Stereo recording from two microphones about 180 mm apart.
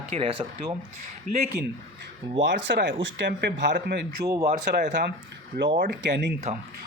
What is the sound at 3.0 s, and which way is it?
Speech, 75° right (ahead or behind).